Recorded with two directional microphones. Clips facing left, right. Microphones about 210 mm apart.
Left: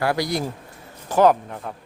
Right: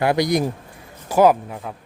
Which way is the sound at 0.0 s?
20° right (ahead or behind).